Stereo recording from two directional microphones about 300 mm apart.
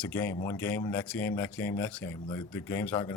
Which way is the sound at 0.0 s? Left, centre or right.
Centre.